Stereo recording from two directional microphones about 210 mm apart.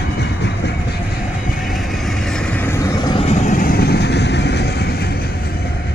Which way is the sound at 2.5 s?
15° left (ahead or behind).